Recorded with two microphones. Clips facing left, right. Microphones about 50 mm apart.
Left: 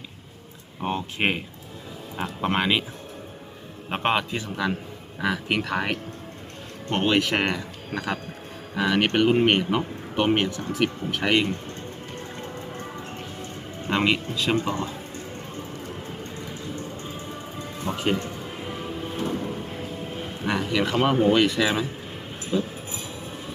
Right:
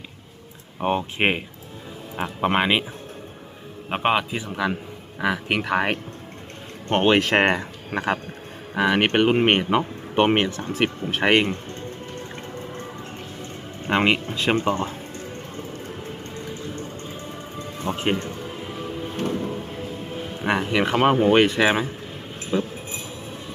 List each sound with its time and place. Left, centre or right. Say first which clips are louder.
0.8 s speech: right 4 dB; right
3.8 s a man's voice: right 2 dB; centre
6.9 s speech: right 4 dB; right
13.8 s speech: right 3 dB; right
17.8 s speech: right 1 dB; right
20.4 s speech: right 3 dB; right
22.5 s a sound: right 2 dB; right